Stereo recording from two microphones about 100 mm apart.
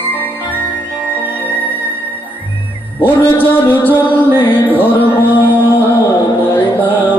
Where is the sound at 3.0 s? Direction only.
20° left (ahead or behind).